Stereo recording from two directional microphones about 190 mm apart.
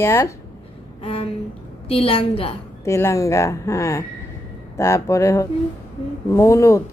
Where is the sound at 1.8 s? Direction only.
30° left (ahead or behind).